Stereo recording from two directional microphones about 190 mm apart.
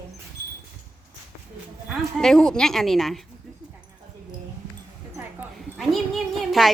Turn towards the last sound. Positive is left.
turn(degrees=0)  # may be behind; listen again after turning